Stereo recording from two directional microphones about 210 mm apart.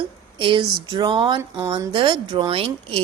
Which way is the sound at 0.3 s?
25° right (ahead or behind).